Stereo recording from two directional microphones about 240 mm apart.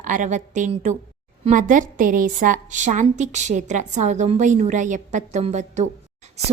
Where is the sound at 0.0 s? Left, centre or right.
Right.